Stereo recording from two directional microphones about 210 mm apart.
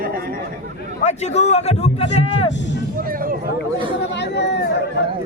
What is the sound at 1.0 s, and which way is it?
A man's voice, 30° left (ahead or behind).